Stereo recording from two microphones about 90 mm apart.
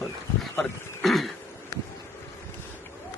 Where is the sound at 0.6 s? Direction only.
5° left (ahead or behind).